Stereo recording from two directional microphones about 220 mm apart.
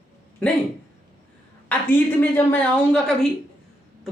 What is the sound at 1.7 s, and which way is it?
A woman's voice, 10° left (ahead or behind).